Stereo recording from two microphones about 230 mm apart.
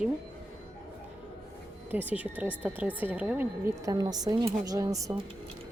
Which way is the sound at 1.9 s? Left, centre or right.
Centre.